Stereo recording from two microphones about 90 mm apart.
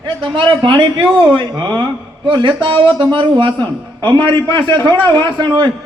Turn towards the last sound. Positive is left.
turn(degrees=-55)  # may be behind; listen again after turning